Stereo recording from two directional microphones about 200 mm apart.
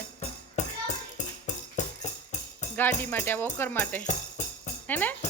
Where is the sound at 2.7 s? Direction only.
10° left (ahead or behind).